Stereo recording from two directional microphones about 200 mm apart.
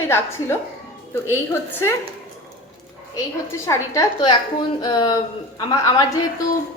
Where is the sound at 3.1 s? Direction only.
15° left (ahead or behind).